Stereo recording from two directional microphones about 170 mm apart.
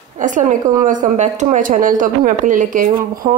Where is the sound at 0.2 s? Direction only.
50° right (ahead or behind).